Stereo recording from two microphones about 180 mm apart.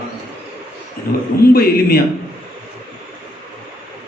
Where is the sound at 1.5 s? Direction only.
55° left (ahead or behind).